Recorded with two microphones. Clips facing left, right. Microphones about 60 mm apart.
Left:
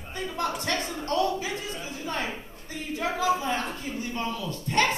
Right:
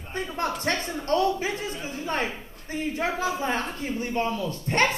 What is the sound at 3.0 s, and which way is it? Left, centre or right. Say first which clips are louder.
Speech: left 3 dB; right.